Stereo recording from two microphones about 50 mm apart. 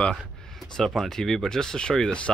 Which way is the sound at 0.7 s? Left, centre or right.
Centre.